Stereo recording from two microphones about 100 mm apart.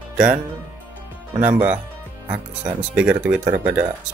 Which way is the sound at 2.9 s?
15° right (ahead or behind).